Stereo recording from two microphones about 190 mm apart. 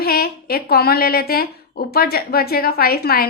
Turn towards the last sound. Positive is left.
turn(degrees=55)  # may be behind; listen again after turning